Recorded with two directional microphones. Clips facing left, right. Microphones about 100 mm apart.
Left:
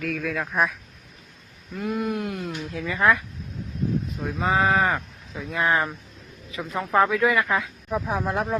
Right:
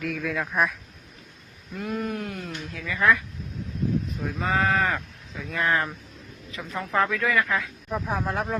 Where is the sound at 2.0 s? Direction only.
25° left (ahead or behind).